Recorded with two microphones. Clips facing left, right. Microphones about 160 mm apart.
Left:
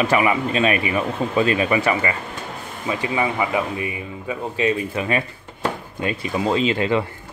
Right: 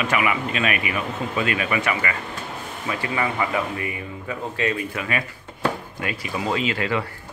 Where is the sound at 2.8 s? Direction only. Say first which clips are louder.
Left 3 dB; 20° left (ahead or behind).